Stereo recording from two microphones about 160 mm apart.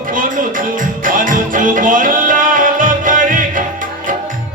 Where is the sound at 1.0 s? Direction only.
55° right (ahead or behind).